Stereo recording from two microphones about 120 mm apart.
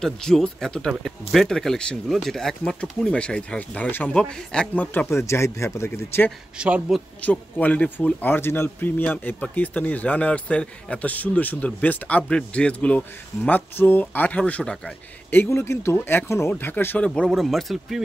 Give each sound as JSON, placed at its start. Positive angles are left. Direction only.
{"t": 0.0, "sound": "speech", "side_deg": 5}
{"t": 6.6, "sound": "speech", "side_deg": -10}
{"t": 7.2, "sound": "speech", "side_deg": 15}
{"t": 15.5, "sound": "speech", "side_deg": 20}